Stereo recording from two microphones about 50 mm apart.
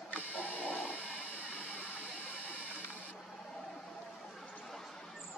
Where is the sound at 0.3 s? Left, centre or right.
Left.